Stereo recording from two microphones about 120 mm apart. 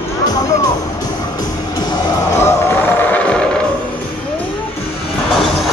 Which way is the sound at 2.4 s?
20° left (ahead or behind).